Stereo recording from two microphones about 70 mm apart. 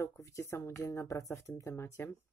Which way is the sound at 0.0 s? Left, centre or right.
Left.